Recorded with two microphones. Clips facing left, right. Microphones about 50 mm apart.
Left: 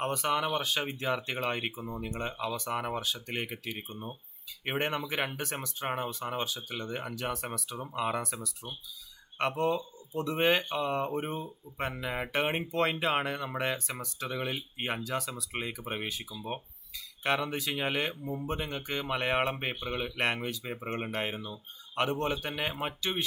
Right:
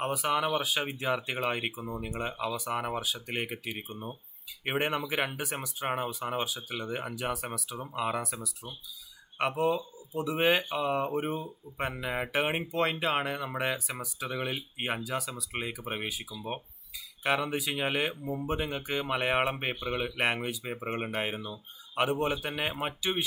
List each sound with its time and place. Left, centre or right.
0.0 s speech: centre
17.2 s speech: centre